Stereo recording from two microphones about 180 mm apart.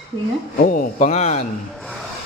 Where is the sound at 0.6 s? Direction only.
50° left (ahead or behind).